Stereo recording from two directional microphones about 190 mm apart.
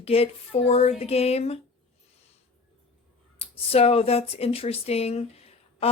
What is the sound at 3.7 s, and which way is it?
Speech, 30° left (ahead or behind).